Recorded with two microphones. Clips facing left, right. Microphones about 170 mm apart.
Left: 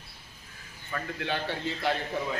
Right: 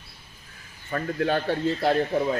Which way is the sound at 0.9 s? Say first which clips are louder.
Right 8 dB; 45° right (ahead or behind).